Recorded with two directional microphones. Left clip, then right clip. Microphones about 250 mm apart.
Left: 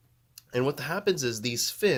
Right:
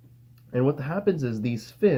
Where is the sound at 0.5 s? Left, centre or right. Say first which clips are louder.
Right 2 dB; left.